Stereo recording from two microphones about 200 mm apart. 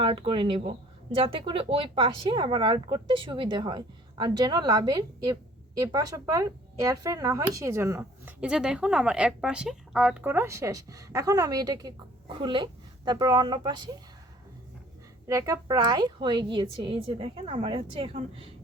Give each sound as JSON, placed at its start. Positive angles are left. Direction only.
{"t": 0.0, "sound": "speech", "side_deg": -25}
{"t": 15.3, "sound": "speech", "side_deg": -15}